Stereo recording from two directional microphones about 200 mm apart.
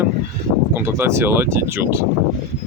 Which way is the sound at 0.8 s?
15° right (ahead or behind).